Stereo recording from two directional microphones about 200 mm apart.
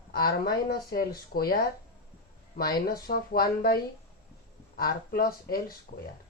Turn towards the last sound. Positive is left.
turn(degrees=40)  # may be behind; listen again after turning